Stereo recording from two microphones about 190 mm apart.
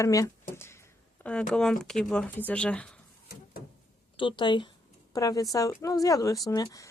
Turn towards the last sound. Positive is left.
turn(degrees=15)  # may be behind; listen again after turning